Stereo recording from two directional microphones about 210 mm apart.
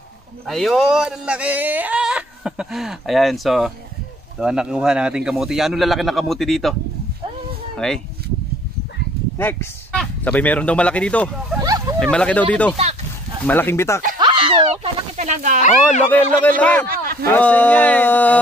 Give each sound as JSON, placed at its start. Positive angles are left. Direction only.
{"t": 0.5, "sound": "speech", "side_deg": 0}
{"t": 7.7, "sound": "speech", "side_deg": 0}
{"t": 9.4, "sound": "speech", "side_deg": 10}
{"t": 11.6, "sound": "a sound", "side_deg": -15}
{"t": 12.0, "sound": "speech", "side_deg": 5}
{"t": 12.7, "sound": "a sound", "side_deg": -30}
{"t": 13.5, "sound": "speech", "side_deg": 10}
{"t": 14.2, "sound": "a sound", "side_deg": -25}
{"t": 16.1, "sound": "speech", "side_deg": 10}
{"t": 16.8, "sound": "speech", "side_deg": -45}
{"t": 17.3, "sound": "speech", "side_deg": 5}